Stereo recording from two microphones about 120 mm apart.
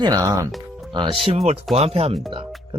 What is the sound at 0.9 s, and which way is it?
Speech, 45° right (ahead or behind).